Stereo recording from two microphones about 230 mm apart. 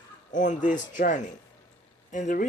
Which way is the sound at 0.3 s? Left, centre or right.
Left.